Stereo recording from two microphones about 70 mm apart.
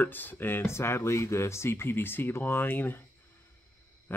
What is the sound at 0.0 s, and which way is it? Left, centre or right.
Speech, left.